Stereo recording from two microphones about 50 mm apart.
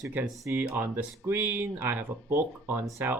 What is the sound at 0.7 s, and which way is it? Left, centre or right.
Speech, right.